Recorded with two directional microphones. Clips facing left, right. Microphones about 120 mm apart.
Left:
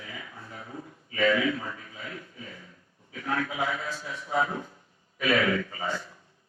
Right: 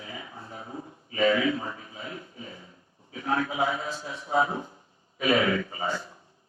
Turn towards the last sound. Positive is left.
turn(degrees=-25)  # may be behind; listen again after turning